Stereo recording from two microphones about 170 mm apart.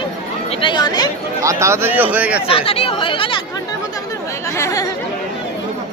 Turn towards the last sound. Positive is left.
turn(degrees=20)  # may be behind; listen again after turning